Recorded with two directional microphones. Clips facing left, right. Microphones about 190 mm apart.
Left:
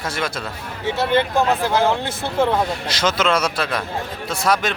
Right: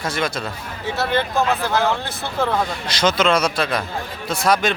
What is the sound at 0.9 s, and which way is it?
Speech, 15° left (ahead or behind).